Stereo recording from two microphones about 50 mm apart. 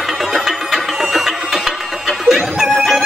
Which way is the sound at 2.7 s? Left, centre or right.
Centre.